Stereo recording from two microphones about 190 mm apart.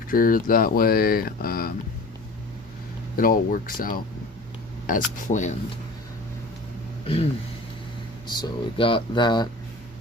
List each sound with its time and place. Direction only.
0.1 s speech: 50° left (ahead or behind)
3.2 s speech: 50° left (ahead or behind)
8.3 s speech: 25° left (ahead or behind)